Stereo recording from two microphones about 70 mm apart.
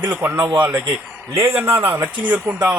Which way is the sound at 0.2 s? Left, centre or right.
Right.